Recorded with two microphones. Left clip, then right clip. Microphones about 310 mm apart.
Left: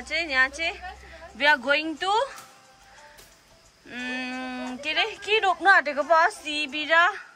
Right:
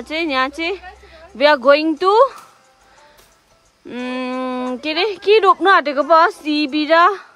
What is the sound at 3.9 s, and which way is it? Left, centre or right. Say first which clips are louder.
A woman's voice: right 8 dB; centre.